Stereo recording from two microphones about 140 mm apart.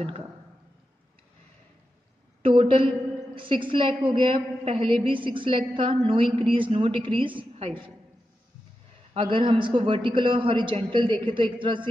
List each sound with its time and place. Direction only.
2.4 s a woman's voice: 40° right (ahead or behind)
9.1 s a woman's voice: 40° right (ahead or behind)